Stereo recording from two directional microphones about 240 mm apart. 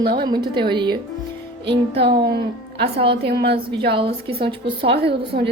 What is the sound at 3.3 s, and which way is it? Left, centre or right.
Speech, right.